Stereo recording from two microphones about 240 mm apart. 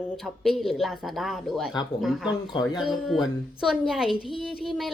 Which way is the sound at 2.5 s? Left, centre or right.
Centre.